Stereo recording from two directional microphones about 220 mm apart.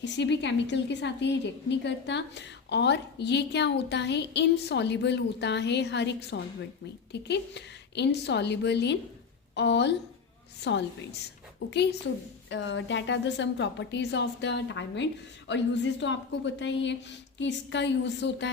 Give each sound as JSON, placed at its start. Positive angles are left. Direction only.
{"t": 0.0, "sound": "a woman's voice", "side_deg": 55}